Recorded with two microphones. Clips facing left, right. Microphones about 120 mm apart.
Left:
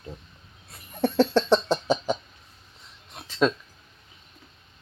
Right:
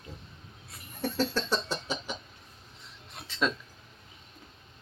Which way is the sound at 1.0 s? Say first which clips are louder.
Left 9 dB; 60° left (ahead or behind).